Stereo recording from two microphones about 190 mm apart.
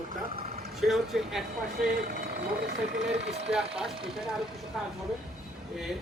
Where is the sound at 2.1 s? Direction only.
60° right (ahead or behind).